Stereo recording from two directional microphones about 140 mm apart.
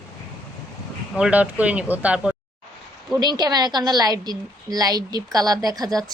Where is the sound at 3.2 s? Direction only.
30° right (ahead or behind).